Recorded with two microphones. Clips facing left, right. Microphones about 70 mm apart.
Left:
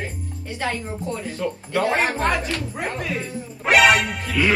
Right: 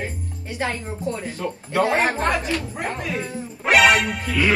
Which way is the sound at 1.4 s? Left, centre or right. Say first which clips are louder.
Right 1 dB; right.